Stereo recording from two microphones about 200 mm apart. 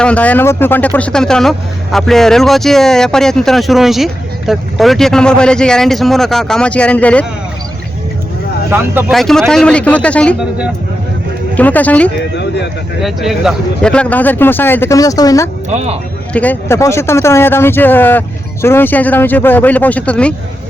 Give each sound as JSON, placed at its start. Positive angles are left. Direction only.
{"t": 0.0, "sound": "speech", "side_deg": 5}
{"t": 8.7, "sound": "speech", "side_deg": -10}
{"t": 9.1, "sound": "speech", "side_deg": 0}
{"t": 11.5, "sound": "speech", "side_deg": 10}
{"t": 15.7, "sound": "speech", "side_deg": -35}
{"t": 16.3, "sound": "speech", "side_deg": 10}